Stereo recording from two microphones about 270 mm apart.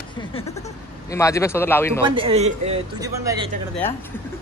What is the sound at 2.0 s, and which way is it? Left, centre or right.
A man's voice, centre.